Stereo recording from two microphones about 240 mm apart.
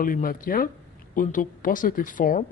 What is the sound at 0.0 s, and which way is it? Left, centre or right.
Speech, left.